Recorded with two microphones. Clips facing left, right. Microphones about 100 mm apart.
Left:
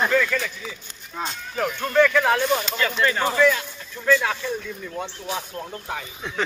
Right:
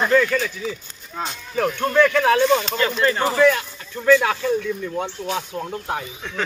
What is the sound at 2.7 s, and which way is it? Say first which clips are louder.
Speech: right 3 dB; 35° right (ahead or behind).